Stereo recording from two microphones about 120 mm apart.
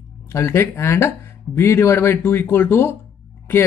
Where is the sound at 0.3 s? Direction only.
25° left (ahead or behind).